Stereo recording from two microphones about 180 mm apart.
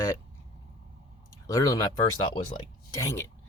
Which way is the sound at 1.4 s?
20° left (ahead or behind).